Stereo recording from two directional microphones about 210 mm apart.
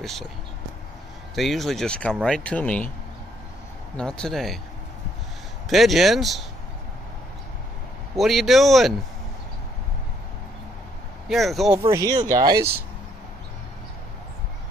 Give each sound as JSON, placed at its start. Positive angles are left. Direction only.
{"t": 0.0, "sound": "speech", "side_deg": 0}
{"t": 1.3, "sound": "speech", "side_deg": 0}
{"t": 3.9, "sound": "speech", "side_deg": 5}
{"t": 5.7, "sound": "speech", "side_deg": 0}
{"t": 8.2, "sound": "speech", "side_deg": 0}
{"t": 11.2, "sound": "speech", "side_deg": 0}
{"t": 11.9, "sound": "speech", "side_deg": -15}